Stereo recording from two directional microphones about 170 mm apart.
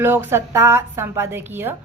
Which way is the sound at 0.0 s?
15° right (ahead or behind).